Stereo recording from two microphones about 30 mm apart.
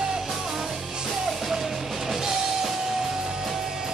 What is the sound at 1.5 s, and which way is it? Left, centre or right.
Music, centre.